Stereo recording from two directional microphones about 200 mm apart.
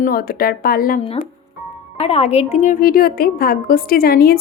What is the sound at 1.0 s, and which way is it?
A woman's voice, 30° left (ahead or behind).